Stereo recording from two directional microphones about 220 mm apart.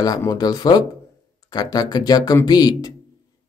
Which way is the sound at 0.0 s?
15° left (ahead or behind).